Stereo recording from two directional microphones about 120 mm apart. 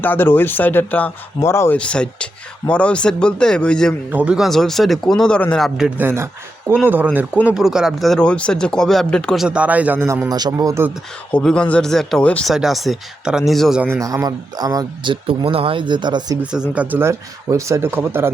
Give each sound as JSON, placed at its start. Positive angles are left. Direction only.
{"t": 0.0, "sound": "speech", "side_deg": 15}
{"t": 1.8, "sound": "speech", "side_deg": 10}
{"t": 4.1, "sound": "speech", "side_deg": -15}
{"t": 4.4, "sound": "speech", "side_deg": 0}
{"t": 6.0, "sound": "speech", "side_deg": -20}
{"t": 7.5, "sound": "speech", "side_deg": -5}
{"t": 10.2, "sound": "speech", "side_deg": -35}
{"t": 11.3, "sound": "speech", "side_deg": 10}
{"t": 13.8, "sound": "speech", "side_deg": -25}
{"t": 16.4, "sound": "speech", "side_deg": -10}